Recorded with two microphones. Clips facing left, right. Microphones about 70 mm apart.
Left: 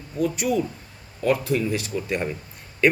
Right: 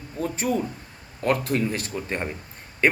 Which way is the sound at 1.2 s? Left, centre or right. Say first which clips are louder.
Left 1 dB; right.